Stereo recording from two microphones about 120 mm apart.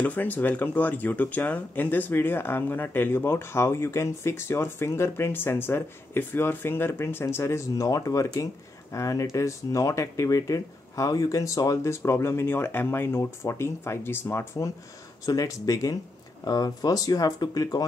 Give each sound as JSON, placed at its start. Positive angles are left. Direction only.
{"t": 0.0, "sound": "speech", "side_deg": 15}